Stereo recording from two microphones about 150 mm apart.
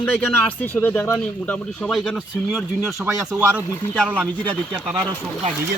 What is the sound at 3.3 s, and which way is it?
Speech, 10° right (ahead or behind).